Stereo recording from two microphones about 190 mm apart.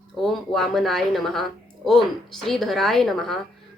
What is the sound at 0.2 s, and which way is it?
Speech, centre (ahead or behind).